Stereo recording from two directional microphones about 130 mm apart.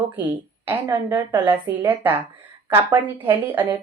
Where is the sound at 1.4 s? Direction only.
35° right (ahead or behind).